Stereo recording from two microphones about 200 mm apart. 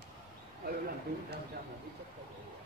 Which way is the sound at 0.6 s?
45° right (ahead or behind).